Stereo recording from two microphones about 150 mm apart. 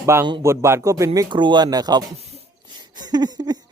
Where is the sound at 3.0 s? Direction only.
25° right (ahead or behind).